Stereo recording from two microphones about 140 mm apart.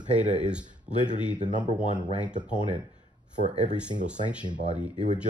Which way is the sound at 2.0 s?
30° right (ahead or behind).